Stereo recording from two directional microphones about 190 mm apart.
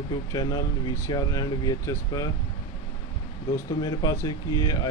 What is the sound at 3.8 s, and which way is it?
Speech, 20° left (ahead or behind).